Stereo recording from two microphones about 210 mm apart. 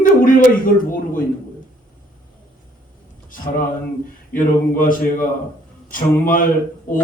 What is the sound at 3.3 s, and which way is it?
A man's voice, 40° left (ahead or behind).